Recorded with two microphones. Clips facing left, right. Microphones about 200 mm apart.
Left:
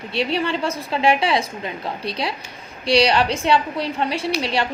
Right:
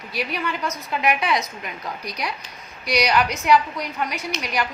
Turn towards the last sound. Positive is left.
turn(degrees=30)  # may be behind; listen again after turning